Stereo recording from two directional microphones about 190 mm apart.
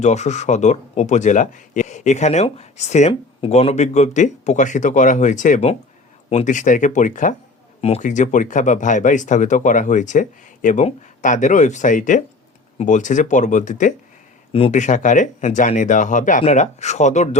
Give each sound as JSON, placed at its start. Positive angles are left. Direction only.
{"t": 0.0, "sound": "speech", "side_deg": 35}